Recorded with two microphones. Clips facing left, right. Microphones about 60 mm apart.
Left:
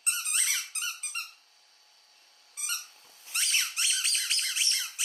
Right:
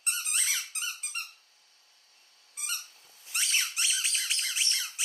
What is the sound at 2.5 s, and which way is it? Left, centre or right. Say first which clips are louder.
Squeak: left 1 dB; centre.